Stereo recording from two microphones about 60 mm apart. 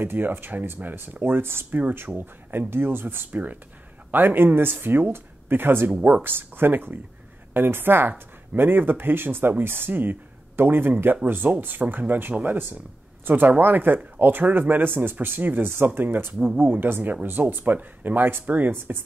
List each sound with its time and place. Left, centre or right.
0.0 s speech: right
2.0 s speech: right
3.3 s speech: right
5.9 s speech: right
16.3 s speech: right